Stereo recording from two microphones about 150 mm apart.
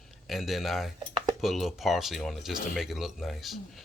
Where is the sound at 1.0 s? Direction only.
35° right (ahead or behind).